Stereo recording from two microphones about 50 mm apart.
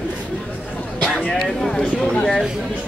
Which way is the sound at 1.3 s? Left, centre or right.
Centre.